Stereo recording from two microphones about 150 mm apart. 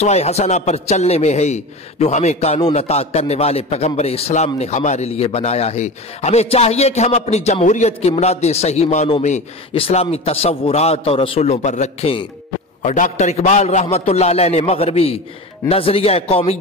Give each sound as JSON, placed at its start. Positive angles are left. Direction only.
{"t": 0.0, "sound": "a man's voice", "side_deg": 45}
{"t": 12.8, "sound": "a man's voice", "side_deg": 55}